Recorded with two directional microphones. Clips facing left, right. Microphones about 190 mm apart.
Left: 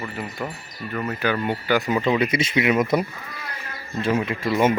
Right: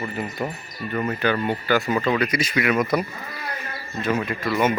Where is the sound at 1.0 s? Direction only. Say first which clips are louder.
Even; 10° left (ahead or behind).